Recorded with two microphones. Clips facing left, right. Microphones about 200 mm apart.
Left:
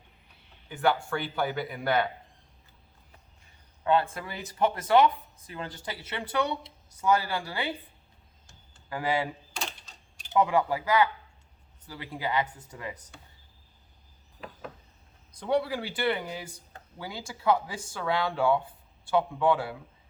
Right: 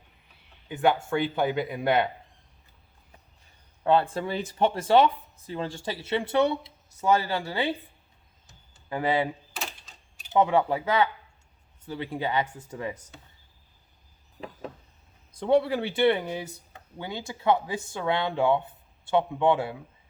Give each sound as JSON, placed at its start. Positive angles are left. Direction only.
{"t": 0.7, "sound": "speech", "side_deg": -20}
{"t": 4.1, "sound": "speech", "side_deg": -30}
{"t": 8.9, "sound": "speech", "side_deg": -25}
{"t": 10.3, "sound": "speech", "side_deg": -25}
{"t": 15.3, "sound": "speech", "side_deg": -25}